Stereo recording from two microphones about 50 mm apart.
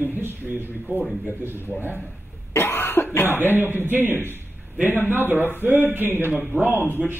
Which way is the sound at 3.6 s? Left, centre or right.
Right.